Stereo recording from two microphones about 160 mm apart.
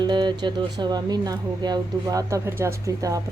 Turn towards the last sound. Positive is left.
turn(degrees=-20)  # may be behind; listen again after turning